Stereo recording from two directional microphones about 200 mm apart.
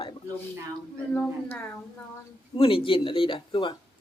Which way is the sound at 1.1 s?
5° left (ahead or behind).